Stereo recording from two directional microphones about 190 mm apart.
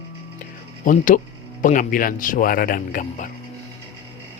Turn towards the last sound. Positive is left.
turn(degrees=45)  # may be behind; listen again after turning